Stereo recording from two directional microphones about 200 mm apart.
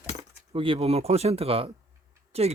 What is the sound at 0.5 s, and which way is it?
Speech, 25° right (ahead or behind).